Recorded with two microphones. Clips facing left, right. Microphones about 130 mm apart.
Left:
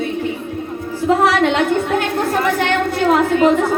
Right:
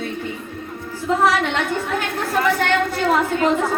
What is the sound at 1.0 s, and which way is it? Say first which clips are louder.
A woman's voice: left 4 dB; 70° left (ahead or behind).